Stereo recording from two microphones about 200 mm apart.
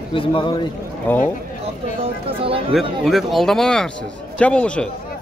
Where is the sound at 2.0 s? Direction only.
25° right (ahead or behind).